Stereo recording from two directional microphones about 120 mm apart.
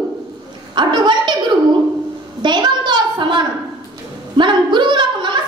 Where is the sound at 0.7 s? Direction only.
40° right (ahead or behind).